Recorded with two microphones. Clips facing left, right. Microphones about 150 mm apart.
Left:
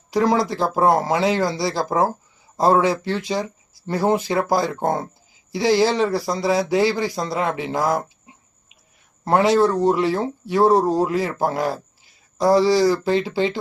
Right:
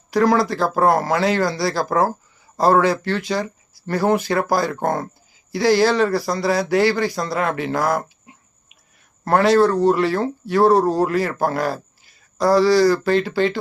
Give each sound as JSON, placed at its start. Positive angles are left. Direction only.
{"t": 0.1, "sound": "speech", "side_deg": 20}
{"t": 9.2, "sound": "speech", "side_deg": 15}